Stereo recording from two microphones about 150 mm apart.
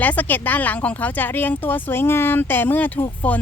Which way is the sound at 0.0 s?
10° left (ahead or behind).